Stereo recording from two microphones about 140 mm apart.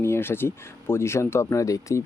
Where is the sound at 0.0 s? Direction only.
15° left (ahead or behind).